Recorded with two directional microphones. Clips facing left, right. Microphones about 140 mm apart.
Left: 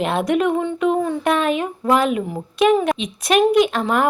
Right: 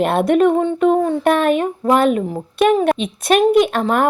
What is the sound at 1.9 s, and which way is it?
Speech, 45° right (ahead or behind).